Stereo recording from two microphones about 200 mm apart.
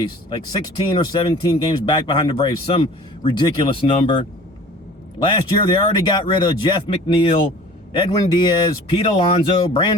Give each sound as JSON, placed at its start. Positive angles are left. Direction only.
{"t": 0.3, "sound": "speech", "side_deg": 20}
{"t": 5.2, "sound": "speech", "side_deg": 25}